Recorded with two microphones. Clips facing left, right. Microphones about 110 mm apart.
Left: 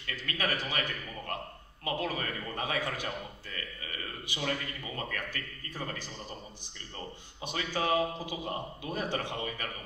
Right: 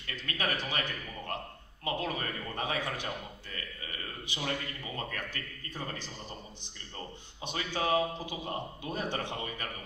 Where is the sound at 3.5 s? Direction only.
30° right (ahead or behind).